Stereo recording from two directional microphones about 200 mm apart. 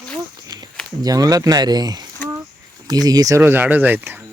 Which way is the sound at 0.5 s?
20° right (ahead or behind).